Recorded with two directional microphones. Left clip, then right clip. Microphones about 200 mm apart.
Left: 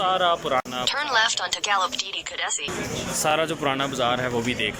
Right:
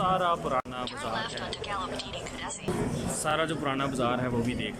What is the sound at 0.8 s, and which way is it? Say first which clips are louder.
Speech: left 12 dB; 45° left (ahead or behind).